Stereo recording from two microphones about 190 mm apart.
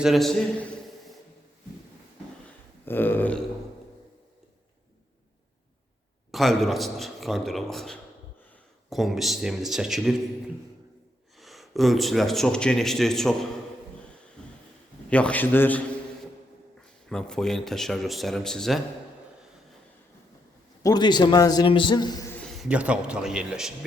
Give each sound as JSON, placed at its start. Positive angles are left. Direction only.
{"t": 0.0, "sound": "speech", "side_deg": 0}
{"t": 2.8, "sound": "a man's voice", "side_deg": 10}
{"t": 6.3, "sound": "speech", "side_deg": 0}
{"t": 11.3, "sound": "speech", "side_deg": 0}
{"t": 15.1, "sound": "a man's voice", "side_deg": 5}
{"t": 17.1, "sound": "speech", "side_deg": 5}
{"t": 20.8, "sound": "a man's voice", "side_deg": 20}
{"t": 22.4, "sound": "a man's voice", "side_deg": 0}